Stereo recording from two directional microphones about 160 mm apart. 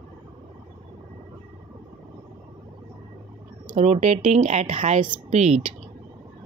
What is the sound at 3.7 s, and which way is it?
Speech, 45° right (ahead or behind).